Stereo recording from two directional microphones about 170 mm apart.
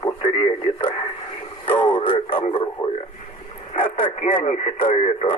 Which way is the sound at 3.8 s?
35° left (ahead or behind).